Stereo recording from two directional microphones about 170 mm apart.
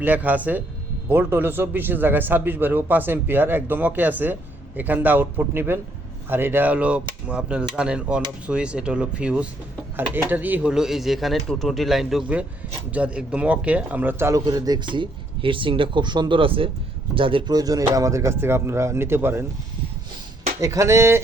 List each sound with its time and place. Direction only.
0.0 s speech: 10° right (ahead or behind)
20.6 s speech: 15° right (ahead or behind)